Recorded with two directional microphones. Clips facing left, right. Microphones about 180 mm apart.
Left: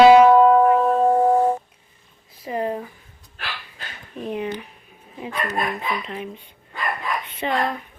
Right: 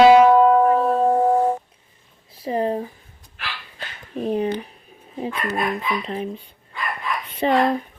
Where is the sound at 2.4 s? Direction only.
30° right (ahead or behind).